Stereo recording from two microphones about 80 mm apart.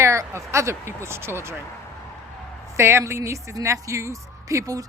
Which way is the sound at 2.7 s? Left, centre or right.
Right.